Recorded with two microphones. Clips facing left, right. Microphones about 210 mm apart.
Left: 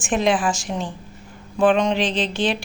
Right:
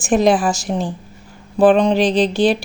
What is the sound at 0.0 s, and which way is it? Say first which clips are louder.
Speech: right 5 dB; 40° right (ahead or behind).